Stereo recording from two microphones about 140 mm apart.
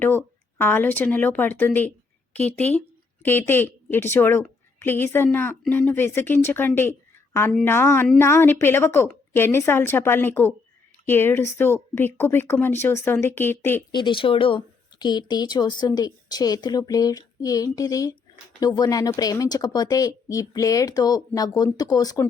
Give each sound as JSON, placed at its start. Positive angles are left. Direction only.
{"t": 0.0, "sound": "a woman's voice", "side_deg": 15}
{"t": 13.9, "sound": "speech", "side_deg": 35}